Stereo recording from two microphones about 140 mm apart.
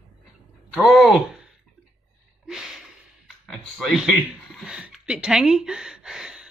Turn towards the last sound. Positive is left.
turn(degrees=-5)  # may be behind; listen again after turning